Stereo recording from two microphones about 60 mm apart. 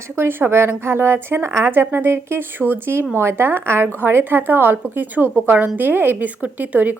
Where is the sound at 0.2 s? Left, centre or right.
Right.